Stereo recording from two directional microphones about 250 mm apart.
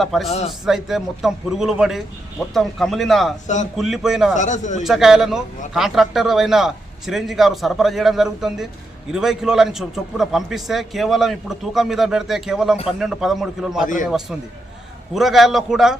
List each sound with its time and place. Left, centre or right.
0.0 s a man's voice: centre
0.3 s a man's voice: left
0.6 s a man's voice: centre
3.4 s a man's voice: left
3.8 s a man's voice: centre
4.4 s a man's voice: left
4.8 s a man's voice: centre
13.8 s a man's voice: left
15.1 s a man's voice: centre